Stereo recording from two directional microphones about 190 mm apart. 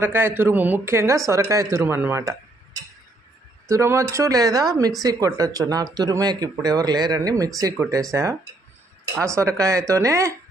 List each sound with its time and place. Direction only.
0.0 s speech: 10° right (ahead or behind)
3.6 s speech: 15° right (ahead or behind)